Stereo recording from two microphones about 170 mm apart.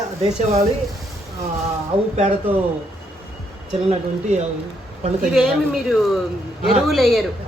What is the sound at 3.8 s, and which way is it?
Speech, 40° right (ahead or behind).